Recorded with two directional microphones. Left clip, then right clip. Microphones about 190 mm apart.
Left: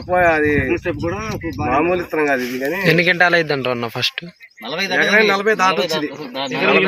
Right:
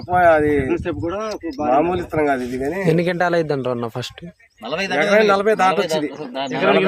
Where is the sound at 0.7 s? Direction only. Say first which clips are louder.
Left 2 dB; 45° right (ahead or behind).